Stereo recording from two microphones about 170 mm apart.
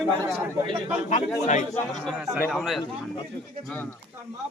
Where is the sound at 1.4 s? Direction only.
45° left (ahead or behind).